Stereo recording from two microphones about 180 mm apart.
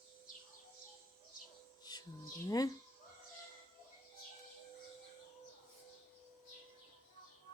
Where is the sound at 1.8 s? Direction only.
20° left (ahead or behind).